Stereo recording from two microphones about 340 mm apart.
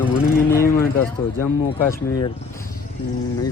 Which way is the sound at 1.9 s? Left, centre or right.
Centre.